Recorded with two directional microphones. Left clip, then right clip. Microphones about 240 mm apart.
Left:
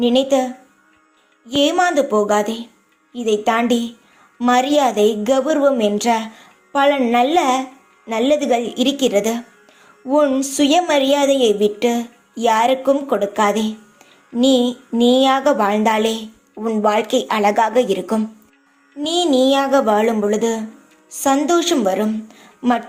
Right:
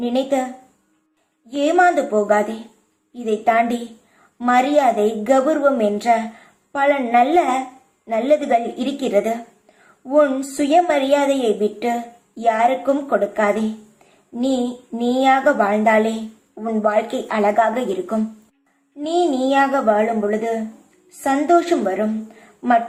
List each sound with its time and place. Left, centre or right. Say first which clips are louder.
0.0 s a woman's voice: left 5 dB; left
1.5 s a woman's voice: even; left
14.9 s a woman's voice: left 2 dB; left